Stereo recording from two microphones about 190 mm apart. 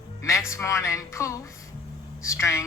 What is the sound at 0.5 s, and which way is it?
A woman's voice, 15° left (ahead or behind).